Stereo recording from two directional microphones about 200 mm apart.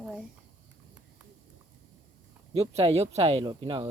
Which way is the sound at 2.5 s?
30° right (ahead or behind).